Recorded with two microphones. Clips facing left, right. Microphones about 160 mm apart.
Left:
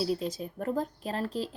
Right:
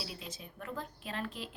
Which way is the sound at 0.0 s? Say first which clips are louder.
Left 15 dB; 40° left (ahead or behind).